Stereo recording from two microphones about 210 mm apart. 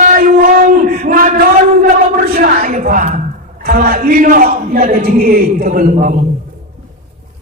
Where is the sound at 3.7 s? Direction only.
45° right (ahead or behind).